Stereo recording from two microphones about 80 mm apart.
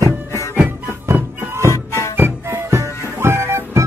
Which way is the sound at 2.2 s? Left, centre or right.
Right.